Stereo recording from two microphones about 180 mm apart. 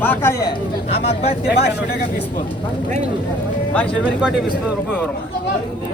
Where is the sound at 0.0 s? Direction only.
10° left (ahead or behind).